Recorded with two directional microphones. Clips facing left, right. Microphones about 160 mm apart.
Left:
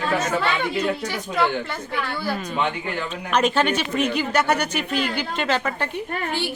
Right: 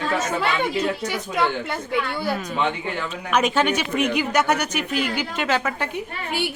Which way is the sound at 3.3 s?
10° right (ahead or behind).